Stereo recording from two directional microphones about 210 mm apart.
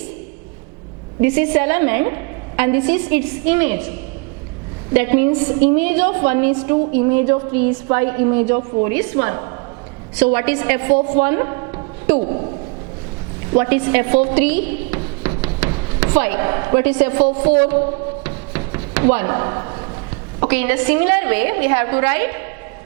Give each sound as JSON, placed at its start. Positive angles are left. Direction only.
{"t": 1.2, "sound": "a woman's voice", "side_deg": -10}
{"t": 4.9, "sound": "a woman's voice", "side_deg": -15}
{"t": 12.2, "sound": "speech", "side_deg": -30}
{"t": 13.5, "sound": "a woman's voice", "side_deg": -10}
{"t": 18.2, "sound": "knock", "side_deg": -15}
{"t": 20.5, "sound": "a woman's voice", "side_deg": -10}